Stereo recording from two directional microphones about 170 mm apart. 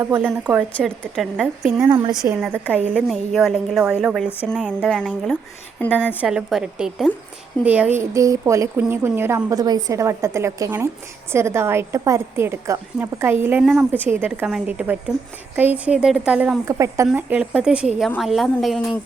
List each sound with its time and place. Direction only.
0.8 s a woman's voice: centre (ahead or behind)
4.3 s speech: 10° left (ahead or behind)
4.6 s a woman's voice: centre (ahead or behind)
5.9 s a woman's voice: 10° right (ahead or behind)
16.6 s a woman's voice: 20° right (ahead or behind); by 18.9 s centre (ahead or behind)